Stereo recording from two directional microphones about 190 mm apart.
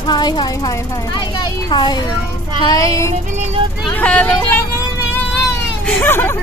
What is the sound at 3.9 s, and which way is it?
Speech, 10° left (ahead or behind).